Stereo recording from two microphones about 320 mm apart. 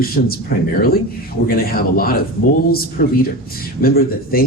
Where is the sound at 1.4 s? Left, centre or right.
Left.